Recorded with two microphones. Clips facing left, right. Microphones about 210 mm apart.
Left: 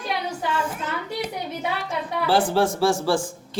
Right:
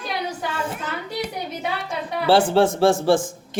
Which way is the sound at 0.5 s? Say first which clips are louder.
Left 1 dB; 25° right (ahead or behind).